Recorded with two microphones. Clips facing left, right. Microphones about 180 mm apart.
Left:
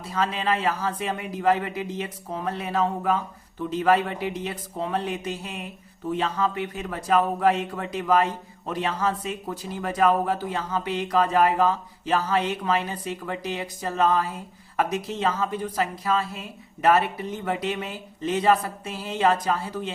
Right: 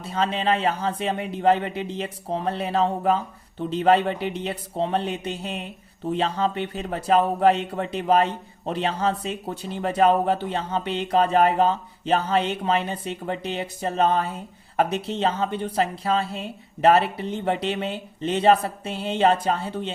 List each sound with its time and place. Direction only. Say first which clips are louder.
0.0 s speech: right 2 dB; 25° right (ahead or behind)